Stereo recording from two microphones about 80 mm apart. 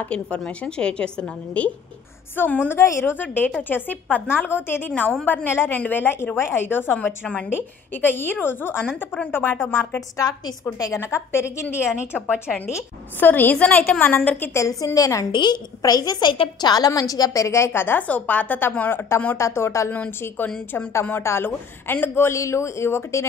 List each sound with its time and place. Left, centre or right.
0.0 s a woman's voice: centre
2.8 s speech: left
3.2 s a woman's voice: left
8.8 s a woman's voice: centre
9.3 s a woman's voice: left
9.9 s a woman's voice: left
11.0 s speech: left
11.7 s a woman's voice: centre
13.2 s a woman's voice: left
15.3 s a woman's voice: left
15.8 s a woman's voice: left
18.0 s a woman's voice: centre
19.3 s speech: left
19.9 s a woman's voice: left